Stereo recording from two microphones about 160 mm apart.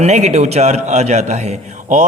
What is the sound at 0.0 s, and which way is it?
A man's voice, 45° right (ahead or behind).